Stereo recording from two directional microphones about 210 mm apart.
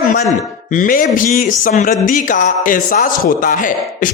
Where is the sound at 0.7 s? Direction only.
40° left (ahead or behind).